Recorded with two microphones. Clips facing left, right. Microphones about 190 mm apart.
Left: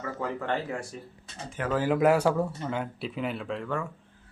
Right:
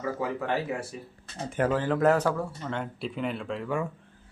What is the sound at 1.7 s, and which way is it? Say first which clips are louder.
Speech: left 2 dB; 10° left (ahead or behind).